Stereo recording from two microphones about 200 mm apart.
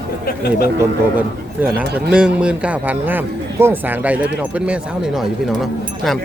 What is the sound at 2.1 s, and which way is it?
A man's voice, 5° right (ahead or behind).